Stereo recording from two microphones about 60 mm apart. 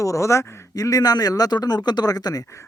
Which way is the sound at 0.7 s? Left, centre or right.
Left.